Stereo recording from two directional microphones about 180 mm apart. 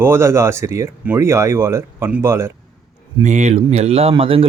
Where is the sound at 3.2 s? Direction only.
40° right (ahead or behind).